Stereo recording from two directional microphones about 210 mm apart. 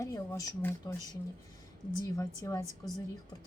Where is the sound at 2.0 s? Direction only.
15° left (ahead or behind).